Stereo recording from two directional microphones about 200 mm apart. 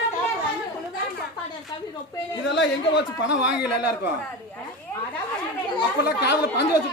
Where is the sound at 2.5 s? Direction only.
65° left (ahead or behind).